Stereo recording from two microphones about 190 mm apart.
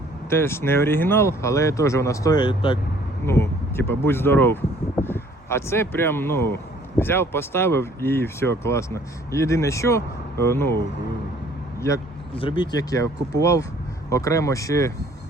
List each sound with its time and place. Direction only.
0.3 s speech: 15° left (ahead or behind)
3.2 s speech: 15° left (ahead or behind)
12.4 s speech: 25° left (ahead or behind)